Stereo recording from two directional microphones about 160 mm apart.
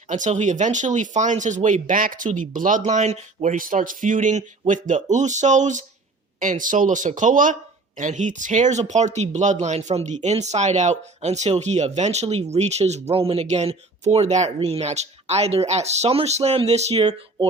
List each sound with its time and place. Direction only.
0.1 s speech: 50° right (ahead or behind)